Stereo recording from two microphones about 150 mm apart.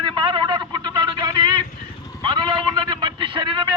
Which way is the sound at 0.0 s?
30° right (ahead or behind).